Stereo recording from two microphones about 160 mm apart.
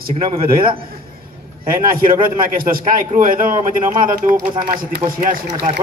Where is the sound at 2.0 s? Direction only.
65° right (ahead or behind).